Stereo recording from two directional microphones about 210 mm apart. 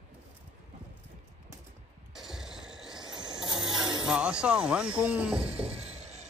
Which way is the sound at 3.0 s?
20° right (ahead or behind).